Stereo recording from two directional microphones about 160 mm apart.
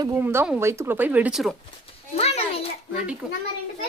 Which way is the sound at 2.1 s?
40° left (ahead or behind).